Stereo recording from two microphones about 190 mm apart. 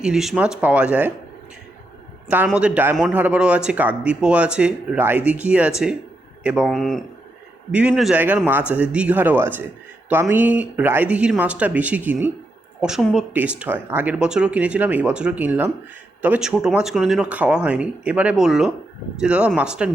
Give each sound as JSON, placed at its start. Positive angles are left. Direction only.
{"t": 0.0, "sound": "speech", "side_deg": 0}
{"t": 2.3, "sound": "speech", "side_deg": -5}